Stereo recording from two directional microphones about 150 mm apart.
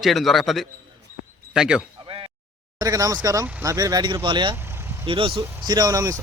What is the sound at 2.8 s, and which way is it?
Speech, 25° right (ahead or behind).